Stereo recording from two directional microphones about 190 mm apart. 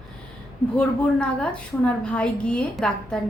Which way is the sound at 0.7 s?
5° left (ahead or behind).